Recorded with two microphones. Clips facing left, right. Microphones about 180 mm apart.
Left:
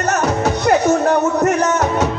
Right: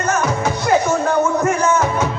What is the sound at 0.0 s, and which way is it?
Music, 40° left (ahead or behind).